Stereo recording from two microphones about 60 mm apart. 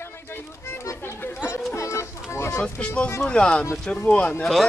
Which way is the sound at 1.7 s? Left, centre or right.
Left.